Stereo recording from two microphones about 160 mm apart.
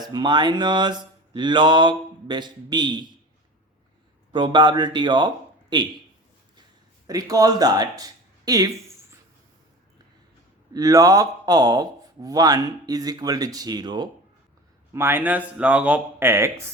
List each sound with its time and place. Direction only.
0.1 s a man's voice: 30° right (ahead or behind)
4.3 s a man's voice: 30° right (ahead or behind)
7.1 s speech: 20° right (ahead or behind)
10.8 s a man's voice: 20° right (ahead or behind)
14.9 s speech: 15° right (ahead or behind)